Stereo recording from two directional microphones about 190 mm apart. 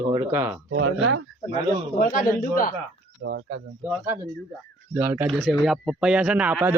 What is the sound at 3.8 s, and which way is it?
A man's voice, 10° right (ahead or behind).